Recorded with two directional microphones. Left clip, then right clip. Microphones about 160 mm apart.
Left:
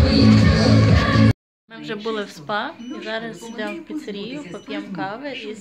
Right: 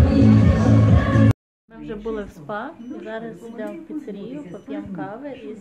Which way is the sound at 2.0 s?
5° left (ahead or behind).